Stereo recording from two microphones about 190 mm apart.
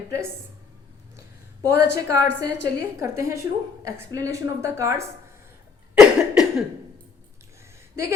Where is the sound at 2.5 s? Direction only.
65° left (ahead or behind).